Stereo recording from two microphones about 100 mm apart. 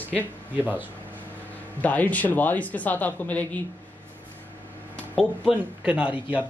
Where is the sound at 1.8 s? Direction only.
15° left (ahead or behind).